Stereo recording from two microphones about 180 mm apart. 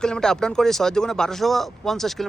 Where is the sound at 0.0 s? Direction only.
5° left (ahead or behind).